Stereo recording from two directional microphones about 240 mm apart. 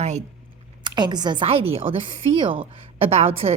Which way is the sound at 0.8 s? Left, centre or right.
Centre.